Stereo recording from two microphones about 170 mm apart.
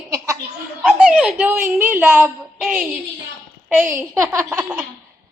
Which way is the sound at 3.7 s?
15° right (ahead or behind).